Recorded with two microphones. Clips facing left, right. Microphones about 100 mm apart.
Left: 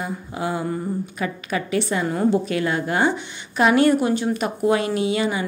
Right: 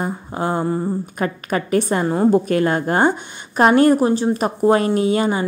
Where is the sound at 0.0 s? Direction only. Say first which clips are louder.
Right 4 dB; 40° right (ahead or behind).